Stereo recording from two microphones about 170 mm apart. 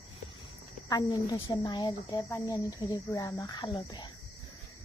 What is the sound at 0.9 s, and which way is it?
Speech, 25° left (ahead or behind).